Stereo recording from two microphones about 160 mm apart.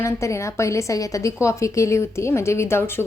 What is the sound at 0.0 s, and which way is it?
A woman's voice, 15° left (ahead or behind).